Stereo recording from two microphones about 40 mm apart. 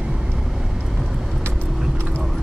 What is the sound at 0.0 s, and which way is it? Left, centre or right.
Vehicle, right.